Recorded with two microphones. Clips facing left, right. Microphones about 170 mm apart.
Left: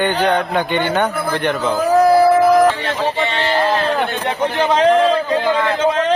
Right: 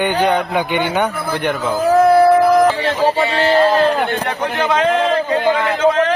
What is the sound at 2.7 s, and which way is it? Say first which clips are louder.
Speech: right 4 dB; 35° right (ahead or behind).